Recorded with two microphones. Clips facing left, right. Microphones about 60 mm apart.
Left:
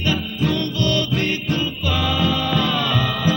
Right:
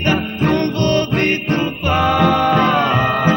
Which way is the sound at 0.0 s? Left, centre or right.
Right.